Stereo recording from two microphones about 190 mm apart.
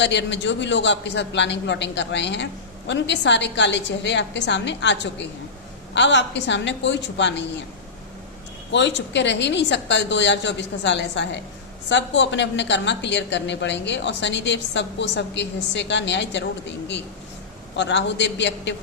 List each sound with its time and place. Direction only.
0.0 s a man's voice: 70° left (ahead or behind)
8.7 s a man's voice: 65° left (ahead or behind)